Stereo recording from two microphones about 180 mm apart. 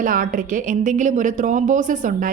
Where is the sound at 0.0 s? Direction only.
50° right (ahead or behind).